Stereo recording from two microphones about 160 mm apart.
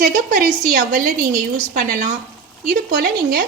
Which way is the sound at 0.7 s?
70° right (ahead or behind).